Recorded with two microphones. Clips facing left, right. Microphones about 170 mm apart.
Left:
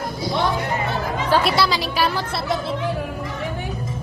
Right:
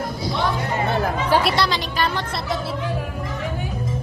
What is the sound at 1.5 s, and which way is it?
A woman's voice, 5° left (ahead or behind).